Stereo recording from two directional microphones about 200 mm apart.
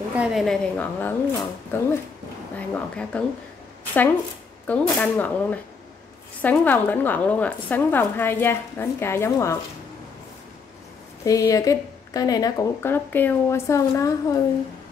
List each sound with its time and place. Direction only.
0.1 s a woman's voice: 5° right (ahead or behind)
4.6 s speech: 5° left (ahead or behind)
11.2 s speech: 15° left (ahead or behind)